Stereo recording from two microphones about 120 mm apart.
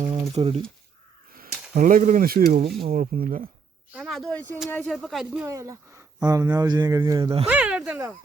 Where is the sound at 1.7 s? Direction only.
90° right.